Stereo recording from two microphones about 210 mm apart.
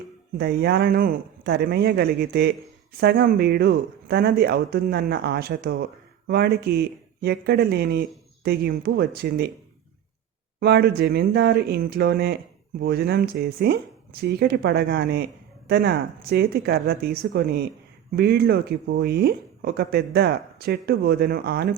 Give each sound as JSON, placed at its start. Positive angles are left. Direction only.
{"t": 0.3, "sound": "speech", "side_deg": -50}
{"t": 10.6, "sound": "speech", "side_deg": -50}